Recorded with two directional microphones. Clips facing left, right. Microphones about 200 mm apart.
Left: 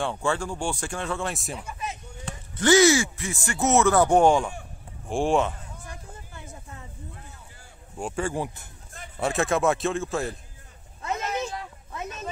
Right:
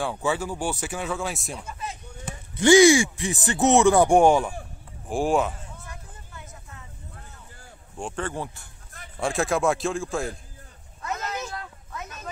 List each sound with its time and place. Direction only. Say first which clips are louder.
0.0 s speech: even; 5° right (ahead or behind)
1.6 s speech: left 1 dB; 15° left (ahead or behind)
2.2 s speech: right 3 dB; 15° right (ahead or behind)
5.9 s a sound: left 2 dB; 30° left (ahead or behind)
8.0 s speech: left 2 dB; 10° left (ahead or behind)
9.2 s speech: even; centre (ahead or behind)
11.2 s vehicle: left 3 dB; 25° left (ahead or behind)